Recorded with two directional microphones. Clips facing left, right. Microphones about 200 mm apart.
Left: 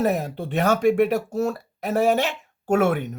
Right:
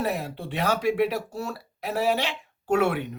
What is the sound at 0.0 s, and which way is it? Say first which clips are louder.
Speech: left 6 dB; 45° left (ahead or behind).